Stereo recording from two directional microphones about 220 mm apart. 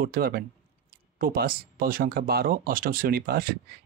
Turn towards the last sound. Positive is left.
turn(degrees=-45)  # may be behind; listen again after turning